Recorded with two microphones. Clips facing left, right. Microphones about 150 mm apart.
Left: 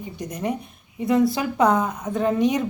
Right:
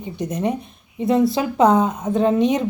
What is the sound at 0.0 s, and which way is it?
Speech, 25° right (ahead or behind).